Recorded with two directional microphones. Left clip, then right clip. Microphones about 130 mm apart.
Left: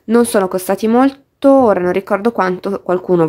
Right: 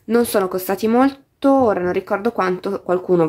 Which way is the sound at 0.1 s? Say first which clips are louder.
Left 4 dB; 35° left (ahead or behind).